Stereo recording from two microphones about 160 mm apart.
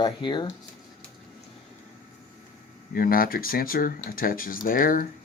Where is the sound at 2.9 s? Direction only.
65° left (ahead or behind).